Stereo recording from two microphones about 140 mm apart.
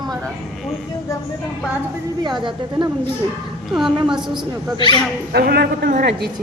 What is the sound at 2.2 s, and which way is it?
Speech, 35° right (ahead or behind).